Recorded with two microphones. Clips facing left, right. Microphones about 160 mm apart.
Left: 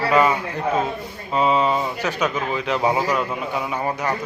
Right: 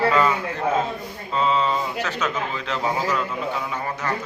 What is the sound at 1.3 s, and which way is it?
A man's voice, 15° left (ahead or behind).